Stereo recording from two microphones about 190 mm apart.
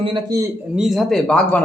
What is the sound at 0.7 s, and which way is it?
Speech, centre (ahead or behind).